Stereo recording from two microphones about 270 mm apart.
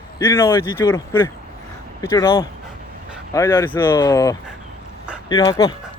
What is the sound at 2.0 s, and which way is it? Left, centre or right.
Speech, centre.